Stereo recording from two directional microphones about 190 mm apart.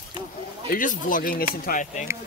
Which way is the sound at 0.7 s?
45° left (ahead or behind).